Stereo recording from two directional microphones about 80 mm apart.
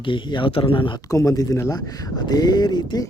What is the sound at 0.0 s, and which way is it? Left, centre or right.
Speech, left.